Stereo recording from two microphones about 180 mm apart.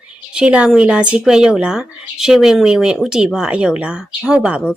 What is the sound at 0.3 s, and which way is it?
Speech, 5° right (ahead or behind).